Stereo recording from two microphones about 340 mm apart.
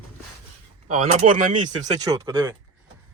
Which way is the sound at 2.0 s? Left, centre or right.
Centre.